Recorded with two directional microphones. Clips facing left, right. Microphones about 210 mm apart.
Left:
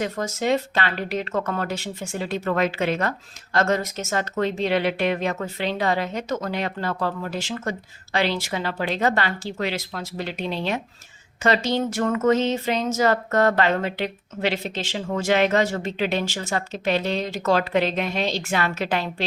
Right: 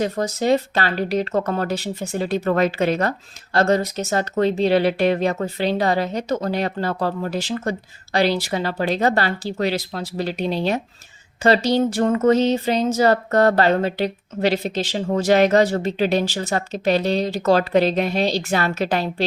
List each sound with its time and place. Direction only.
0.0 s speech: 35° right (ahead or behind)